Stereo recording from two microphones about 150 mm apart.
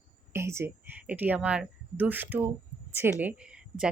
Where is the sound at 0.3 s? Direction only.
15° right (ahead or behind).